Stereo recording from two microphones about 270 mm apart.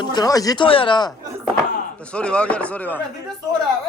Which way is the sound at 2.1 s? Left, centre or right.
Centre.